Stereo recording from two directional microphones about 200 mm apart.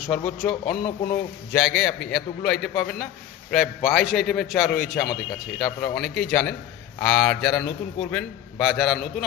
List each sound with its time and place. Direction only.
0.1 s a man's voice: 5° left (ahead or behind)
0.5 s speech: 45° left (ahead or behind)
1.5 s a man's voice: 5° left (ahead or behind)